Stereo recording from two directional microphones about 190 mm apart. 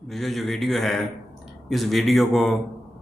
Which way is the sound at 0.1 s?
Centre (ahead or behind).